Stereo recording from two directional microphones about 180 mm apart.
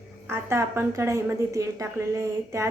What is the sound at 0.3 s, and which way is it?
A woman's voice, 15° right (ahead or behind).